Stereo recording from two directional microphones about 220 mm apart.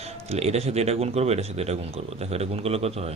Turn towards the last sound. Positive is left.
turn(degrees=-30)  # may be behind; listen again after turning